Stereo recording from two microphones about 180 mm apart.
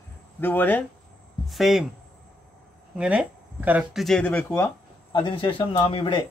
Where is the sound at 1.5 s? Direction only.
Centre (ahead or behind).